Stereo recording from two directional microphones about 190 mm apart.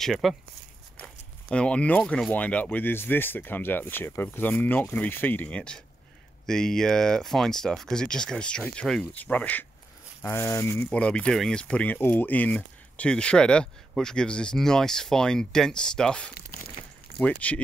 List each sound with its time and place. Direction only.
0.0 s speech: centre (ahead or behind)
16.8 s a sound: 30° left (ahead or behind)
17.2 s speech: 5° left (ahead or behind)